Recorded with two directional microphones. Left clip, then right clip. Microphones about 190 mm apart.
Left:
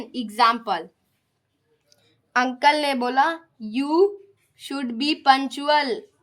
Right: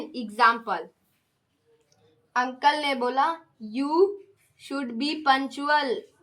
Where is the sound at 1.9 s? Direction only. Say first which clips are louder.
Left 5 dB; 45° left (ahead or behind).